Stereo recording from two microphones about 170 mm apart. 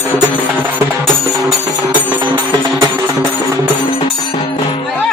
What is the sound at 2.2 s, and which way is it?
Music, 25° right (ahead or behind).